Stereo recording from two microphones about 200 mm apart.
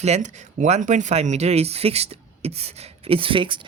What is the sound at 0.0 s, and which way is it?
Speech, 35° right (ahead or behind).